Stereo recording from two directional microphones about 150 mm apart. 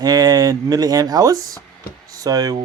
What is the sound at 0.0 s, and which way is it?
Speech, 25° right (ahead or behind).